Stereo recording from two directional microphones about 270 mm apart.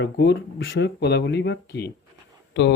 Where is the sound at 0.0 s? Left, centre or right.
Left.